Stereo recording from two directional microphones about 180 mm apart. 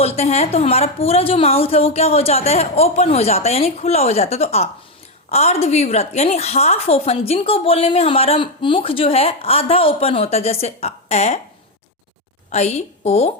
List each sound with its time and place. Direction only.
0.0 s a woman's voice: 35° left (ahead or behind)
12.5 s a woman's voice: 40° left (ahead or behind)